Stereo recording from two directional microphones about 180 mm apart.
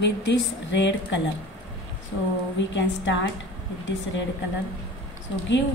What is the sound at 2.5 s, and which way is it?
Speech, 90° left.